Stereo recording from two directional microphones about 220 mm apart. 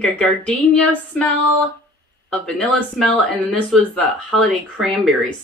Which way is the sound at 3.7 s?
5° left (ahead or behind).